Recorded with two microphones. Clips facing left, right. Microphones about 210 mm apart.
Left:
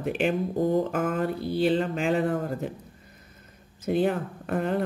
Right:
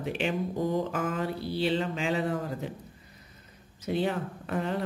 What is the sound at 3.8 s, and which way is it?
Speech, 50° left (ahead or behind).